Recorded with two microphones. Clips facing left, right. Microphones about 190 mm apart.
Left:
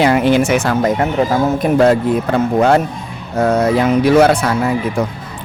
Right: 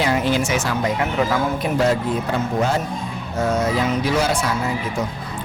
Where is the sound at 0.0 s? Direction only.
65° left (ahead or behind).